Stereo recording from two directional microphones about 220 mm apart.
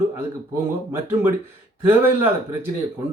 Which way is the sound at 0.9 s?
10° right (ahead or behind).